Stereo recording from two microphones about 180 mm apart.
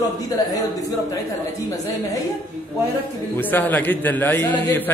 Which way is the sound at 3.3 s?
10° left (ahead or behind).